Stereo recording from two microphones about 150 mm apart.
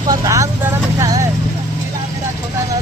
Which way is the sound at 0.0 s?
25° right (ahead or behind).